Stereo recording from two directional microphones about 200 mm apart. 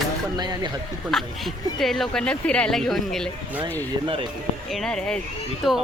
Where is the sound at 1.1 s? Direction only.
Centre (ahead or behind).